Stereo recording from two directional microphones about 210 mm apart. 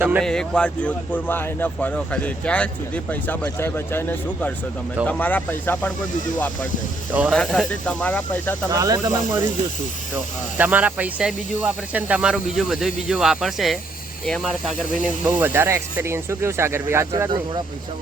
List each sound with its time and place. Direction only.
0.0 s speech: 10° right (ahead or behind)
0.3 s speech: 5° left (ahead or behind)
7.1 s speech: 5° right (ahead or behind)
8.7 s speech: 15° right (ahead or behind)
10.6 s speech: 5° right (ahead or behind)